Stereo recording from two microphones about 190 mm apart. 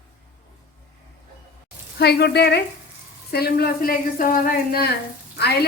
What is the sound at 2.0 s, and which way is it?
Speech, 60° left (ahead or behind).